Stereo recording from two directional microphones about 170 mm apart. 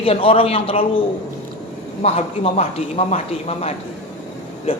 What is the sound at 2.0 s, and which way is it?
A woman's voice, 35° left (ahead or behind).